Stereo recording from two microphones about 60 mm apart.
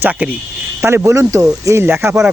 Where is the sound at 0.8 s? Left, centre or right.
Right.